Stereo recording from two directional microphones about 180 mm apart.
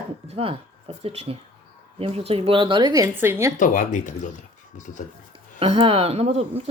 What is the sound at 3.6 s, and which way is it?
Speech, 45° left (ahead or behind).